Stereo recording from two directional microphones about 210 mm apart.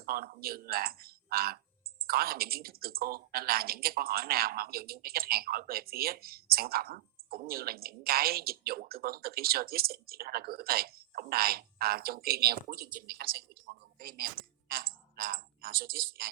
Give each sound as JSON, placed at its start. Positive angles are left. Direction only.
{"t": 0.0, "sound": "speech", "side_deg": -45}